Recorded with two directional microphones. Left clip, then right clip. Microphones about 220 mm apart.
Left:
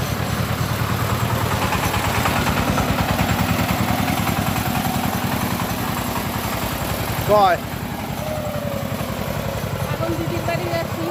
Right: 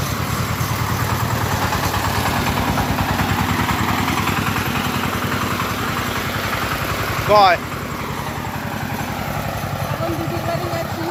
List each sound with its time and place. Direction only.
7.3 s speech: 20° left (ahead or behind)